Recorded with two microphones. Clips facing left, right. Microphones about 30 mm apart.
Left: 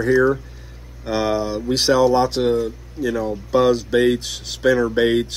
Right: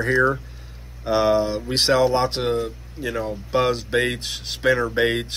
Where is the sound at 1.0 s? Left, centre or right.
Centre.